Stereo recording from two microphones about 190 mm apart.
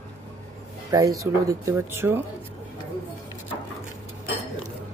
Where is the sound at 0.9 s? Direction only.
20° right (ahead or behind).